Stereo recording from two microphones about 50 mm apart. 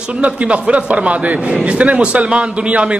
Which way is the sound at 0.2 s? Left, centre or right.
Right.